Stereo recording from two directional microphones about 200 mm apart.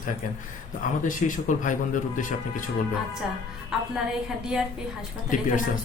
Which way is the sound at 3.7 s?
5° right (ahead or behind).